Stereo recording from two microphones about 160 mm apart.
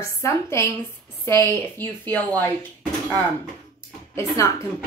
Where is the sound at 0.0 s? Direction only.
15° left (ahead or behind).